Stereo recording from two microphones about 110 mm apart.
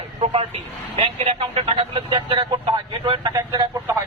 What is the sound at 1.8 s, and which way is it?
Speech, 45° right (ahead or behind).